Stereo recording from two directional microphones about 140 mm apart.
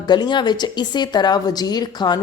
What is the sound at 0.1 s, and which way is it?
A woman's voice, 30° left (ahead or behind).